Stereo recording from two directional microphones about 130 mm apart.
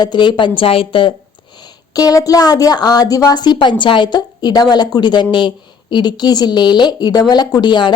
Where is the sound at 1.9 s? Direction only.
30° left (ahead or behind).